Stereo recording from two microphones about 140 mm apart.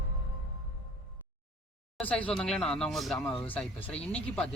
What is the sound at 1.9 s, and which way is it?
Speech, 10° left (ahead or behind).